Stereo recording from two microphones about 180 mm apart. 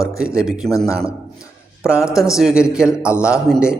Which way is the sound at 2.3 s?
5° right (ahead or behind).